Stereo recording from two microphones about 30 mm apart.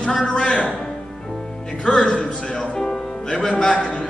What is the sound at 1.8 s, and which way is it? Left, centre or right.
Speech, left.